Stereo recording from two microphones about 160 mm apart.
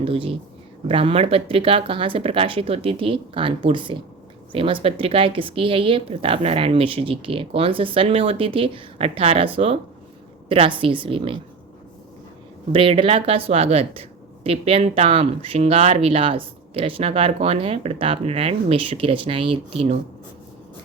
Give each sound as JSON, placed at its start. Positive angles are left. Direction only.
{"t": 0.0, "sound": "speech", "side_deg": -35}
{"t": 10.5, "sound": "speech", "side_deg": -35}
{"t": 12.7, "sound": "speech", "side_deg": -35}